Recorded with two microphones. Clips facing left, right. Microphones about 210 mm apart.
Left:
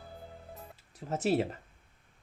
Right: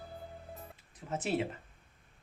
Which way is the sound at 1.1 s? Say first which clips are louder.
Left 4 dB; 40° left (ahead or behind).